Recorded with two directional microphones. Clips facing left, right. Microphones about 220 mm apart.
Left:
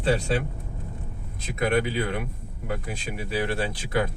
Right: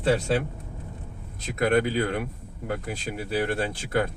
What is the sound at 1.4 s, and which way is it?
Speech, 45° right (ahead or behind).